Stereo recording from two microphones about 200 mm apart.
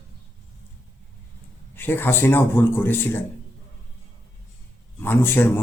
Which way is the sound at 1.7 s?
10° left (ahead or behind).